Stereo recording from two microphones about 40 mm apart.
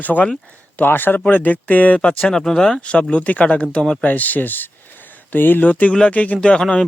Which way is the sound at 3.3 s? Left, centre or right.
Left.